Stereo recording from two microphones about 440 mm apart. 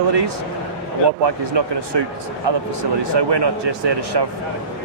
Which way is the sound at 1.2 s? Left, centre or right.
Right.